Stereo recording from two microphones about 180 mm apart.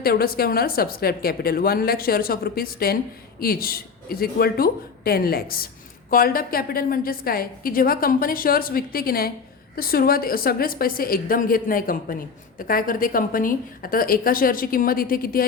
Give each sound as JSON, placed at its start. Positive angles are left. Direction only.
{"t": 0.0, "sound": "a woman's voice", "side_deg": 55}